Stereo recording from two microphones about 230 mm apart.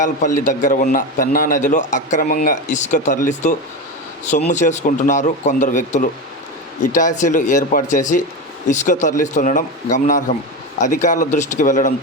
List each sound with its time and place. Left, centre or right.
0.0 s a man's voice: left